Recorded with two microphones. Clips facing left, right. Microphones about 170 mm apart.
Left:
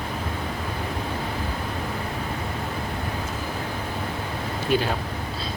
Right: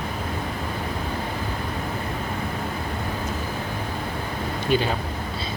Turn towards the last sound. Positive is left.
turn(degrees=0)  # may be behind; listen again after turning